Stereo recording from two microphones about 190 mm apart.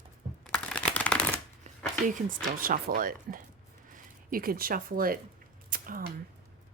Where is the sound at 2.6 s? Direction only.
50° right (ahead or behind).